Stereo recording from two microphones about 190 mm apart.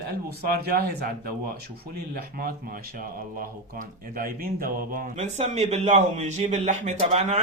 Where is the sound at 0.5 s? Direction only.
55° right (ahead or behind).